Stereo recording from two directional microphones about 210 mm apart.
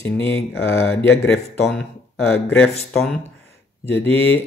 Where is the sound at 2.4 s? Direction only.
5° left (ahead or behind).